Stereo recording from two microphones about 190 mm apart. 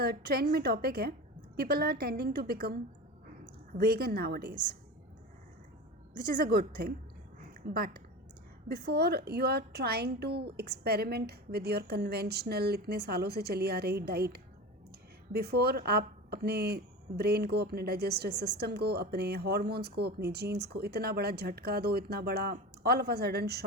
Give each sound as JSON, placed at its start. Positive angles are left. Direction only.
{"t": 0.0, "sound": "speech", "side_deg": -55}
{"t": 6.3, "sound": "a woman's voice", "side_deg": -50}